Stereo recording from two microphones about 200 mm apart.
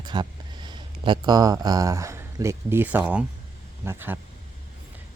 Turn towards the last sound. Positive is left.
turn(degrees=-10)  # may be behind; listen again after turning